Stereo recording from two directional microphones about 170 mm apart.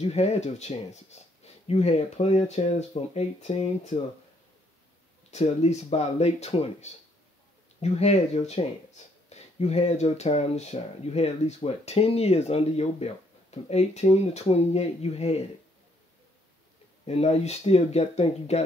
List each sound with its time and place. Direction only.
0.0 s speech: 40° left (ahead or behind)
5.3 s speech: 40° left (ahead or behind)
17.0 s speech: 40° left (ahead or behind)